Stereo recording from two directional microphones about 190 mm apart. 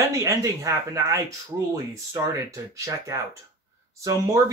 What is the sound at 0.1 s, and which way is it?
Speech, 15° right (ahead or behind).